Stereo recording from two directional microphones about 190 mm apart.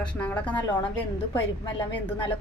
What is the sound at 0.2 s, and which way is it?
Speech, 10° left (ahead or behind).